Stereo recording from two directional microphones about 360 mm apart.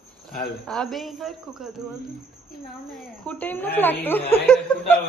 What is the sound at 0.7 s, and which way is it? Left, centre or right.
Speech, centre.